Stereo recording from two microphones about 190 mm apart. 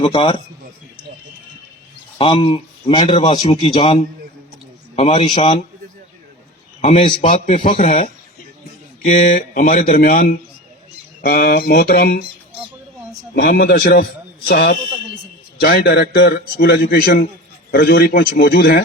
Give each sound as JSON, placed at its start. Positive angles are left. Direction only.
{"t": 0.0, "sound": "speech", "side_deg": 30}
{"t": 2.1, "sound": "speech", "side_deg": 30}
{"t": 6.8, "sound": "a man's voice", "side_deg": 40}
{"t": 13.3, "sound": "a man's voice", "side_deg": 50}